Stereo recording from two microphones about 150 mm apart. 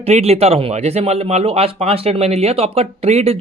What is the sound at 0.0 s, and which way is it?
Speech, 45° right (ahead or behind).